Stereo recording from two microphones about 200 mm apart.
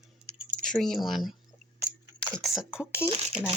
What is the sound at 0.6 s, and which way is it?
Speech, centre (ahead or behind).